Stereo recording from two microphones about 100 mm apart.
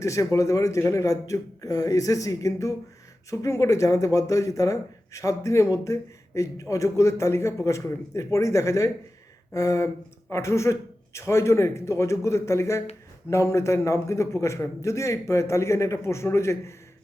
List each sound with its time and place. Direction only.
0.0 s a man's voice: 30° left (ahead or behind)